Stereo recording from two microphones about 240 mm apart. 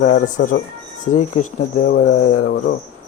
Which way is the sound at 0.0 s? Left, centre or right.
Left.